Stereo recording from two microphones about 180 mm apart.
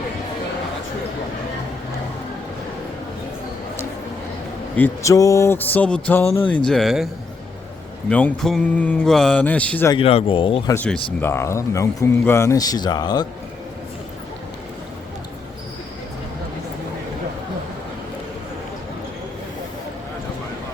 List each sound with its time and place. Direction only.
4.8 s speech: 20° left (ahead or behind); by 7.1 s centre (ahead or behind)
8.1 s speech: 5° left (ahead or behind)
9.9 s speech: 30° left (ahead or behind)
10.8 s speech: 5° left (ahead or behind); by 13.2 s 25° left (ahead or behind)